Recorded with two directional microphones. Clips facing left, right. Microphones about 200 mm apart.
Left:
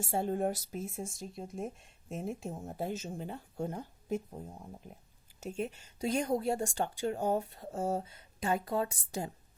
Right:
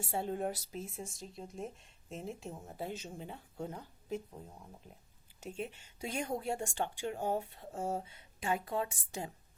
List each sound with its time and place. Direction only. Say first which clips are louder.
0.0 s speech: left 4 dB; 45° left (ahead or behind)